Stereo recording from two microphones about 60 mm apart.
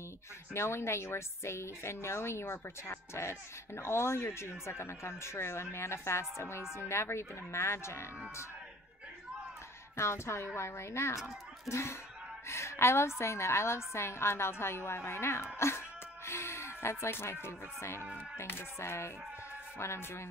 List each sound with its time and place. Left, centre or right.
0.5 s speech: left
9.9 s speech: left
11.1 s a child's voice: centre
11.7 s speech: left
18.0 s music: centre
18.4 s speech: left